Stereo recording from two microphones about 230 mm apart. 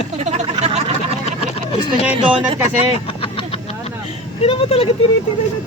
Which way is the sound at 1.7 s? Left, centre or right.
Left.